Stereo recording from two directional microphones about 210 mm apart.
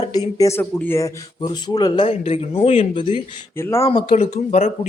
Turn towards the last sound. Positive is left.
turn(degrees=30)  # may be behind; listen again after turning